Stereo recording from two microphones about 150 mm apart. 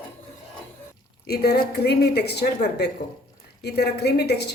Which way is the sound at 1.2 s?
90° left.